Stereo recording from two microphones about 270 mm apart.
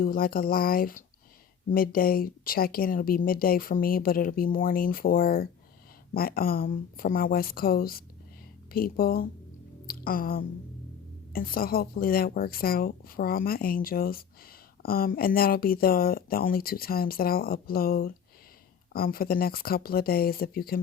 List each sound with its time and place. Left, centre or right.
0.0 s speech: left
9.8 s a sound: left
11.3 s speech: left